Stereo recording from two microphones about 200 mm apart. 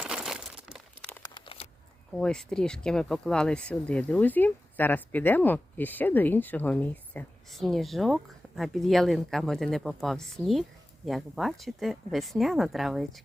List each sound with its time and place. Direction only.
0.0 s crumpling: 5° right (ahead or behind)
1.2 s a sound: 25° left (ahead or behind)
2.1 s speech: 5° left (ahead or behind)